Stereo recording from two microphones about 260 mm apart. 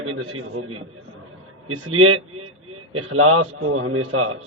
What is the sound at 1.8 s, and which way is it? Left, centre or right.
A man's voice, right.